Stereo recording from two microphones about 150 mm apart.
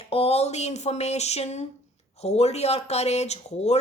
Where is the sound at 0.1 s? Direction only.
40° left (ahead or behind).